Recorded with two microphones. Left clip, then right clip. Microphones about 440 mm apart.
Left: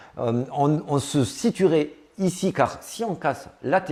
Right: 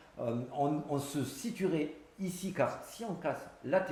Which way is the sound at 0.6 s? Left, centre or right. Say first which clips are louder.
Left 10 dB; left.